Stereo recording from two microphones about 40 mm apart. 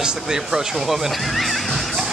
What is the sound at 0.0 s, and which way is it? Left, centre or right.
Speech, centre.